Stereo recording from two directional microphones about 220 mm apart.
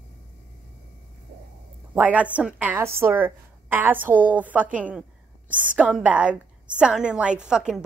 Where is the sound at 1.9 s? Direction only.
5° right (ahead or behind).